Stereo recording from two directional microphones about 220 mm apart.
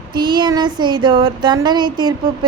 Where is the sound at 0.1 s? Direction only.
20° right (ahead or behind).